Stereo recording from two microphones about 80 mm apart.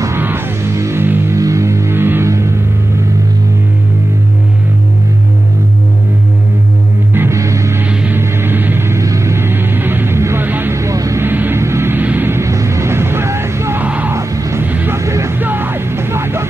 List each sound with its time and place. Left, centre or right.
0.2 s music: right
1.3 s music: right
7.2 s music: right
8.2 s music: right
10.8 s vehicle: right
11.2 s a sound: right
13.8 s music: centre
14.1 s music: right
14.6 s music: right
15.0 s music: right
15.4 s music: right